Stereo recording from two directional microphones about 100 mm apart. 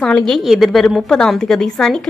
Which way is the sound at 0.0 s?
5° left (ahead or behind).